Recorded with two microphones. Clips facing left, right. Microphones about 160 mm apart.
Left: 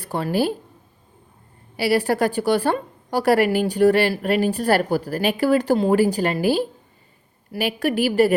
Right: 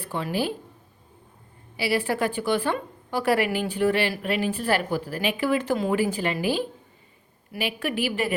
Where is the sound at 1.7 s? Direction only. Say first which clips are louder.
Left 5 dB; 40° left (ahead or behind).